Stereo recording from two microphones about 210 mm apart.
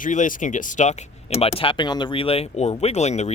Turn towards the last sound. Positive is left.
turn(degrees=30)  # may be behind; listen again after turning